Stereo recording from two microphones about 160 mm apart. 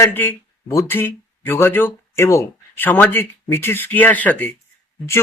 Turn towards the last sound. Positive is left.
turn(degrees=10)  # may be behind; listen again after turning